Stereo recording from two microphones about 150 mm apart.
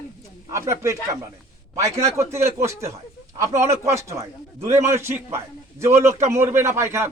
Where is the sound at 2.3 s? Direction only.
15° right (ahead or behind).